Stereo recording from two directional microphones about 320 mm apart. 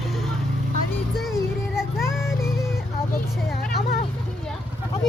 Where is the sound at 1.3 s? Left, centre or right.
Centre.